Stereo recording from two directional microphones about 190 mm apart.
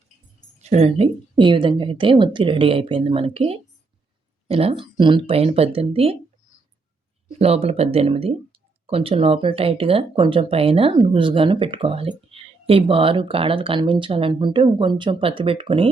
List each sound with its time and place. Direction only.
0.6 s speech: 35° right (ahead or behind)
7.3 s speech: 30° right (ahead or behind)